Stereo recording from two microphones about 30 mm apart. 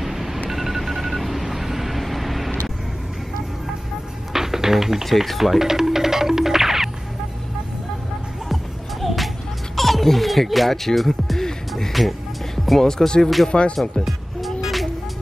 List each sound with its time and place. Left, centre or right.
0.0 s a sound: centre
0.5 s vehicle: centre
4.3 s music: centre
5.0 s speech: centre
5.6 s music: centre
9.0 s music: centre
9.8 s speech: centre
11.9 s speech: centre
12.8 s speech: left
13.5 s speech: left
14.0 s music: centre